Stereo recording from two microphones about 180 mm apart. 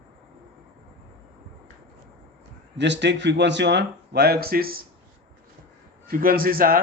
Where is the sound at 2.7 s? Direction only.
80° right; by 4.9 s 55° right (ahead or behind).